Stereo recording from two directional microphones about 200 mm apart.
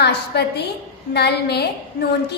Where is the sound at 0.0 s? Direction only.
55° left (ahead or behind).